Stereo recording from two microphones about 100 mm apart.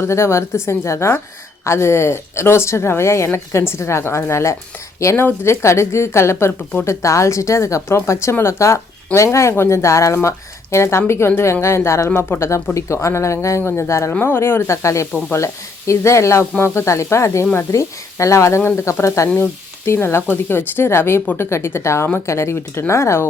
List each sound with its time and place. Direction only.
0.0 s a woman's voice: 25° left (ahead or behind)